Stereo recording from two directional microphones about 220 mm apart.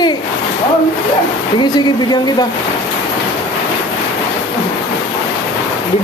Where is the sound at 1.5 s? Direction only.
20° left (ahead or behind).